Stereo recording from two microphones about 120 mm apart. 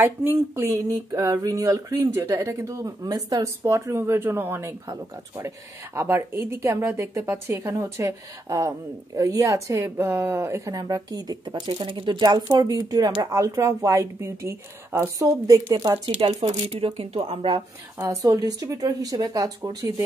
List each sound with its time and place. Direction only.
0.0 s a woman's voice: 15° right (ahead or behind)
5.9 s a woman's voice: 20° right (ahead or behind)
16.2 s speech: 45° right (ahead or behind)
16.6 s speech: 55° right (ahead or behind)
17.9 s speech: 25° right (ahead or behind)